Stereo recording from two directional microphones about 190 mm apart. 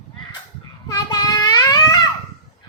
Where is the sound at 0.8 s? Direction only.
20° left (ahead or behind).